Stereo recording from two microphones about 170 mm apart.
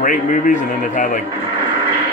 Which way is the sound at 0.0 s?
50° left (ahead or behind).